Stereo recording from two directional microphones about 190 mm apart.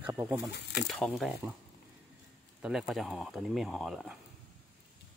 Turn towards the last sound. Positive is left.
turn(degrees=0)  # may be behind; listen again after turning